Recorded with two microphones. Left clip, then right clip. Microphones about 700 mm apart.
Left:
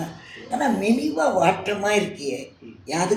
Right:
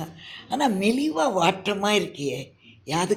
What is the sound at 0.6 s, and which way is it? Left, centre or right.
Speech, right.